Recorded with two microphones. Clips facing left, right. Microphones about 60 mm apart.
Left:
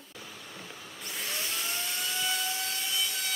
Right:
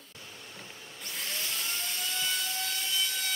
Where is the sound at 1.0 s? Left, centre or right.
Centre.